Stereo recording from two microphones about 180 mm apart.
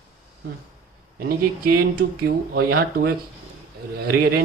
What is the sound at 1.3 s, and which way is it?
Speech, 55° right (ahead or behind).